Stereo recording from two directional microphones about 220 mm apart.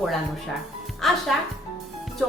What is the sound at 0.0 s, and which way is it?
Speech, centre (ahead or behind).